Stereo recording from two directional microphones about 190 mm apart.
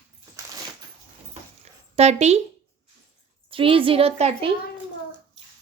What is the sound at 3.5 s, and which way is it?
Speech, 30° right (ahead or behind).